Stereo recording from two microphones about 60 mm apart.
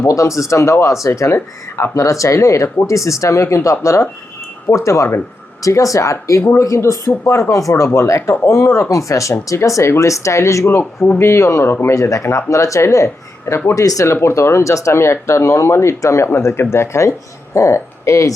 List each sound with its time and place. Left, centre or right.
0.1 s speech: left
11.9 s speech: left
13.7 s speech: left
14.1 s speech: left